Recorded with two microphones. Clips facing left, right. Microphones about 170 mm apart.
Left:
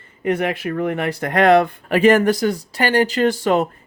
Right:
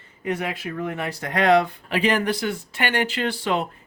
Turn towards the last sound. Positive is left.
turn(degrees=45)  # may be behind; listen again after turning